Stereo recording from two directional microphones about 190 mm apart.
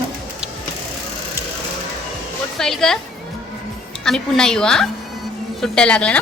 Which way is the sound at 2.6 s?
Centre (ahead or behind).